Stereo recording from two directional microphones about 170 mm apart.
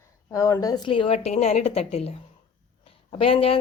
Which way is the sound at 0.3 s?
15° left (ahead or behind).